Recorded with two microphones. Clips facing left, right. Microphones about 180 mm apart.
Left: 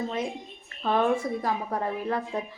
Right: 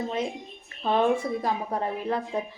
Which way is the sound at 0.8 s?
25° right (ahead or behind).